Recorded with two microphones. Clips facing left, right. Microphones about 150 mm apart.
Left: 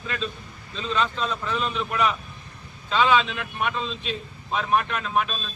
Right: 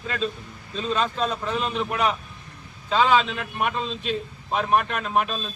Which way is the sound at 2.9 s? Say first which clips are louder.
Right 1 dB; 40° right (ahead or behind).